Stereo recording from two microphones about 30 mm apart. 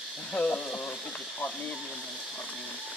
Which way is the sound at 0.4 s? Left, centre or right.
Left.